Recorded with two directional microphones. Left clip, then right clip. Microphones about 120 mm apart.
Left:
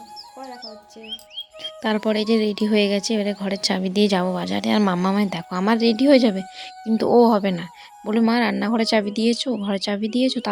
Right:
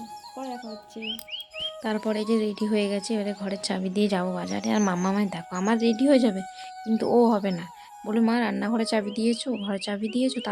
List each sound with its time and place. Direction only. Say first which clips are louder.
1.8 s speech: left 8 dB; 50° left (ahead or behind)
8.0 s speech: left 5 dB; 35° left (ahead or behind)